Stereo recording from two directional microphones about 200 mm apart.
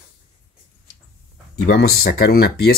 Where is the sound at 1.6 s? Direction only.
50° left (ahead or behind).